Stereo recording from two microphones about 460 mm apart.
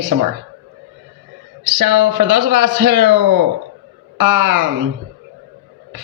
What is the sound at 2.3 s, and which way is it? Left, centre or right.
Speech, right.